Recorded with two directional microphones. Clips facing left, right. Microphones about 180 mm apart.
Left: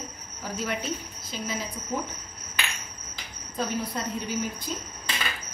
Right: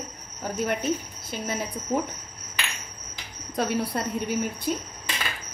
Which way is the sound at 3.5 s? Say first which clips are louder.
Right 4 dB; 70° right (ahead or behind).